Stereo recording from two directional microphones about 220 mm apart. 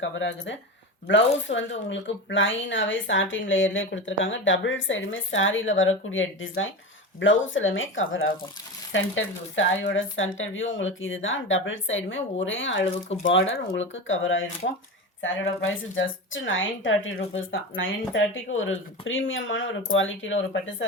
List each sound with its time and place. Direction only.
0.0 s speech: 55° left (ahead or behind)
14.6 s speech: 40° left (ahead or behind)
15.2 s speech: 60° left (ahead or behind)